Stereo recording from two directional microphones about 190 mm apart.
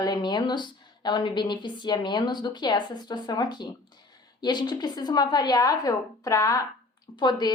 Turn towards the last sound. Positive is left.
turn(degrees=25)  # may be behind; listen again after turning